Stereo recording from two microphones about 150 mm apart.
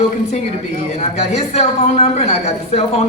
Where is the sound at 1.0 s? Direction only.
50° left (ahead or behind).